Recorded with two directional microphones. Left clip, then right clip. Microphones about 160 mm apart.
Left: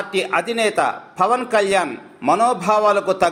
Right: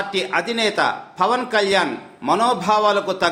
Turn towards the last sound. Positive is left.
turn(degrees=20)  # may be behind; listen again after turning